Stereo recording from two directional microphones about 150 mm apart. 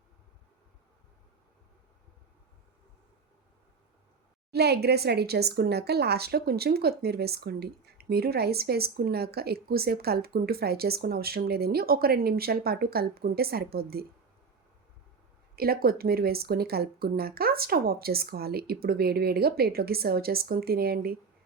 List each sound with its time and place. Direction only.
4.5 s speech: 90° right
15.5 s speech: 90° right